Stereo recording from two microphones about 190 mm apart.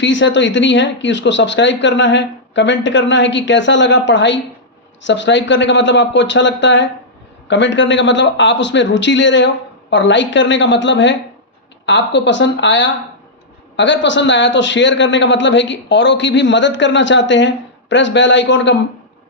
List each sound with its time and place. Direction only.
0.0 s a man's voice: 70° left (ahead or behind)